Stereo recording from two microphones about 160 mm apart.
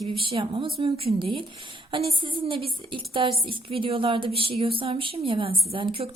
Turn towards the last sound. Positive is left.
turn(degrees=-35)  # may be behind; listen again after turning